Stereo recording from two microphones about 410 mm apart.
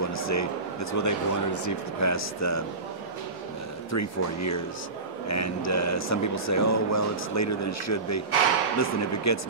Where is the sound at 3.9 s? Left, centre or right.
Left.